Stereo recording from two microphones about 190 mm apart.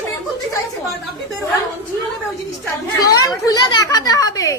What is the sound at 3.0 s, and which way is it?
A woman's voice, 20° left (ahead or behind).